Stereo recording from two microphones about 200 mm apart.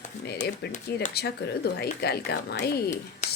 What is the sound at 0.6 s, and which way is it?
A woman's voice, 55° left (ahead or behind).